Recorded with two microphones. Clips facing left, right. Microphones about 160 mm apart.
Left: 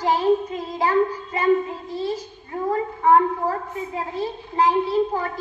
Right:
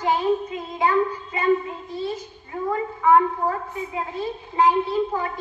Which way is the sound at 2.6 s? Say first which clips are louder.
Left 1 dB; 35° left (ahead or behind).